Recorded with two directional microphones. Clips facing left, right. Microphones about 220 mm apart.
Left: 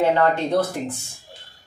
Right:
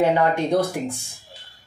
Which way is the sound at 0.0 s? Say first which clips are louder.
Even; 15° right (ahead or behind).